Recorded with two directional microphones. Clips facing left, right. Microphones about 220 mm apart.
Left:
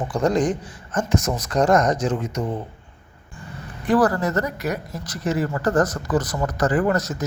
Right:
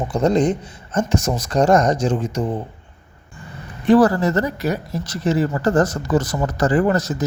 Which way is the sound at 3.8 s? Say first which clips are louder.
Right 5 dB; 25° right (ahead or behind).